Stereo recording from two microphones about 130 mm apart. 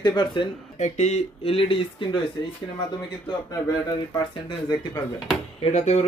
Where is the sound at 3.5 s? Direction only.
30° left (ahead or behind).